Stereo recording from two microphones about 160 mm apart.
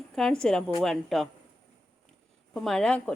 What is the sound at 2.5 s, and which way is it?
Speech, 5° left (ahead or behind).